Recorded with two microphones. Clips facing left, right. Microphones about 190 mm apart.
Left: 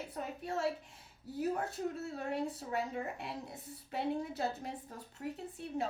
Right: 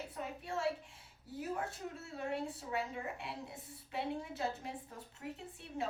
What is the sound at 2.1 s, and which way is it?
A woman's voice, 40° left (ahead or behind).